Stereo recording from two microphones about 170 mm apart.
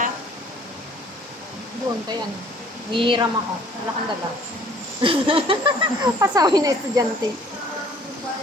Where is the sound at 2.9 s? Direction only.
30° right (ahead or behind).